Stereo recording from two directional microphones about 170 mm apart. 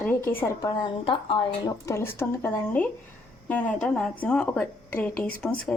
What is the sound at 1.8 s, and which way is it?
Speech, 15° left (ahead or behind).